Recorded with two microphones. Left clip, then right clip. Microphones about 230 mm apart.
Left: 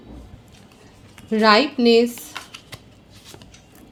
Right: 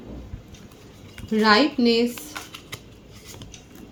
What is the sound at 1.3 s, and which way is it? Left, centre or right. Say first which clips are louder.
Speech: left 3 dB; left.